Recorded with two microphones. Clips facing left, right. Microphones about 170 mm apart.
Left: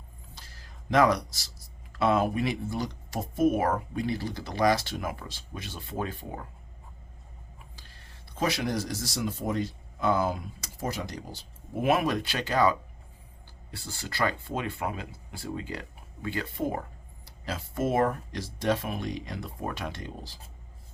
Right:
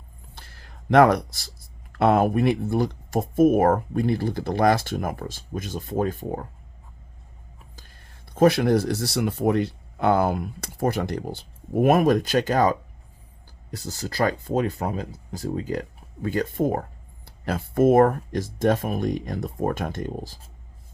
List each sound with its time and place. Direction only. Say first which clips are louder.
0.3 s speech: right 5 dB; 60° right (ahead or behind); by 6.5 s 45° right (ahead or behind)
8.4 s speech: right 11 dB; 55° right (ahead or behind)